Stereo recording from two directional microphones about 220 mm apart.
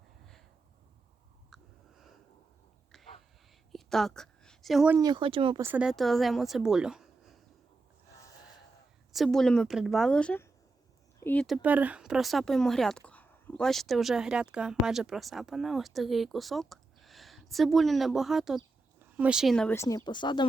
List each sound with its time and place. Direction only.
3.7 s a sound: centre (ahead or behind)
4.9 s speech: 20° right (ahead or behind)
5.6 s speech: 5° right (ahead or behind)
9.1 s a woman's voice: centre (ahead or behind); by 20.4 s 20° left (ahead or behind)